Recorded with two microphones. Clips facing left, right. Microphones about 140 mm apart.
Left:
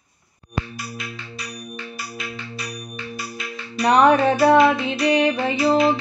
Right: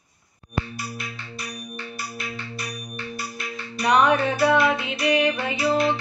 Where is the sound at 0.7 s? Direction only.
90° left.